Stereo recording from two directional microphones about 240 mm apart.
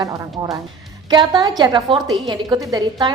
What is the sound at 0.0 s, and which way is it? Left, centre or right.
A woman's voice, centre.